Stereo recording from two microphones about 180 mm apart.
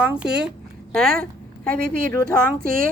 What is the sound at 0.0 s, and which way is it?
Speech, 5° right (ahead or behind).